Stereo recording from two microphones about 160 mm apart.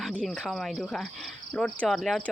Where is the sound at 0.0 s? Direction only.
5° left (ahead or behind).